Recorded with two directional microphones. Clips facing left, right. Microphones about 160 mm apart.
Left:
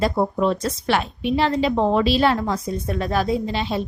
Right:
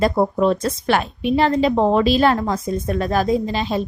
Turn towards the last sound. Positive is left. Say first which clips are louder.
# right 3 dB
turn(degrees=-45)  # may be behind; listen again after turning